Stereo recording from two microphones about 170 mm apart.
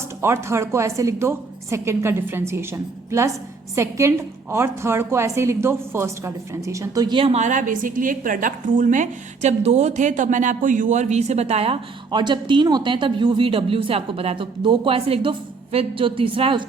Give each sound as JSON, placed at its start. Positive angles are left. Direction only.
{"t": 0.2, "sound": "a woman's voice", "side_deg": -15}